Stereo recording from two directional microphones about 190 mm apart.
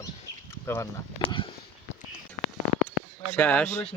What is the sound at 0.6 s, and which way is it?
Speech, 15° left (ahead or behind).